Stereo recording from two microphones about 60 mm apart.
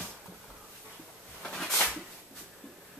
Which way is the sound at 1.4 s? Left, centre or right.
Centre.